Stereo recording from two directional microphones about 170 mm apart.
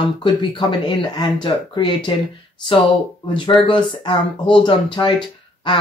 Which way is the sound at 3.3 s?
30° left (ahead or behind).